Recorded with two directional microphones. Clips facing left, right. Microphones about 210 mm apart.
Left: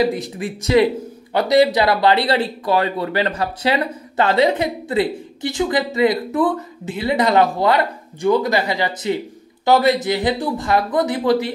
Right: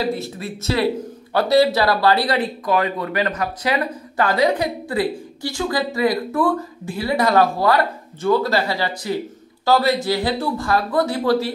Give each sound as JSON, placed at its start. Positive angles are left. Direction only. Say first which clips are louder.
{"t": 0.0, "sound": "speech", "louder": "left 4 dB", "side_deg": 15}